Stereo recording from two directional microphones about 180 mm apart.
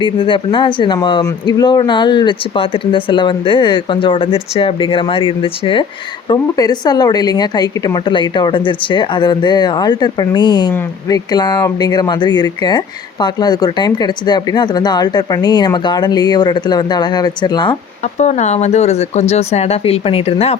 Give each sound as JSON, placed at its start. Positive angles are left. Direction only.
{"t": 0.0, "sound": "speech", "side_deg": 25}
{"t": 18.2, "sound": "speech", "side_deg": 40}